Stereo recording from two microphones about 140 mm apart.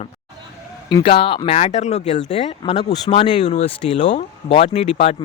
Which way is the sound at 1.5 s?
50° left (ahead or behind).